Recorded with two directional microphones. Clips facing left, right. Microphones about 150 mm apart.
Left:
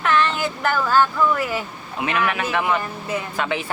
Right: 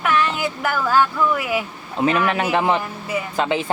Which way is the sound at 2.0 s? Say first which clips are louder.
Right 4 dB; 30° right (ahead or behind).